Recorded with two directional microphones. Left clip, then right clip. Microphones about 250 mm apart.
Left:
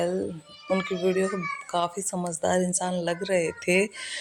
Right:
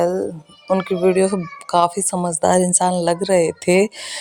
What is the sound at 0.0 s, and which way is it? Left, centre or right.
Speech, right.